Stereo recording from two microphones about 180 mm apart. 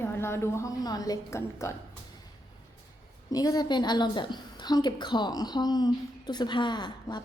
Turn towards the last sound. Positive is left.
turn(degrees=25)  # may be behind; listen again after turning